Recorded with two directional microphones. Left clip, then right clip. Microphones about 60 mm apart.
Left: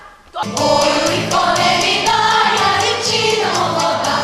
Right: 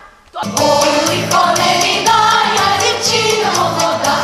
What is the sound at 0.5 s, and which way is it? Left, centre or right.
Music, right.